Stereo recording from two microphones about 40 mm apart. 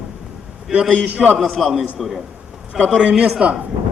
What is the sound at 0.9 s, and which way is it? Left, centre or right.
Speech, right.